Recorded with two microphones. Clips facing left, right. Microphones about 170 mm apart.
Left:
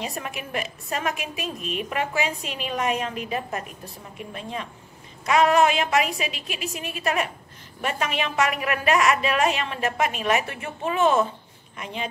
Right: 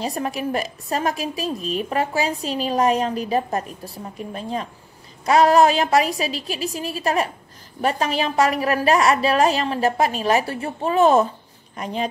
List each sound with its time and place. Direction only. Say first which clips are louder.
0.0 s a woman's voice: right 7 dB; 35° right (ahead or behind)